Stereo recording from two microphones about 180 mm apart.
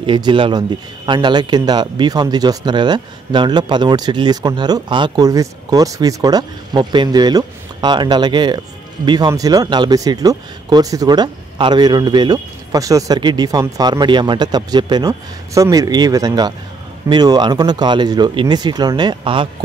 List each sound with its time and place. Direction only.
0.0 s speech: 25° right (ahead or behind)